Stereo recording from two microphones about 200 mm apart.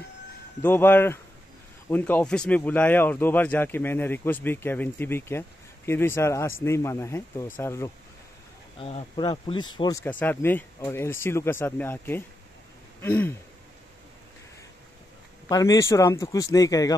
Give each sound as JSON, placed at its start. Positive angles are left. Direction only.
{"t": 0.6, "sound": "speech", "side_deg": 10}
{"t": 8.7, "sound": "speech", "side_deg": 30}
{"t": 10.0, "sound": "speech", "side_deg": 10}
{"t": 15.4, "sound": "speech", "side_deg": 15}